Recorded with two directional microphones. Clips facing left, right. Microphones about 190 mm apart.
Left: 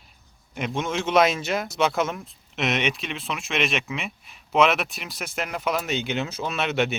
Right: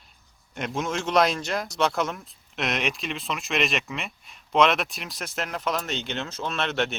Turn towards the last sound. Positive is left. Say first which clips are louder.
# left 2 dB
turn(degrees=5)  # may be behind; listen again after turning